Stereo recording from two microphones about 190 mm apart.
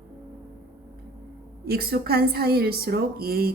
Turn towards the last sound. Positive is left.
turn(degrees=-55)  # may be behind; listen again after turning